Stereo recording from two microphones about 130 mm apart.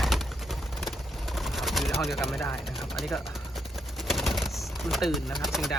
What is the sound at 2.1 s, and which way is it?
Speech, centre (ahead or behind).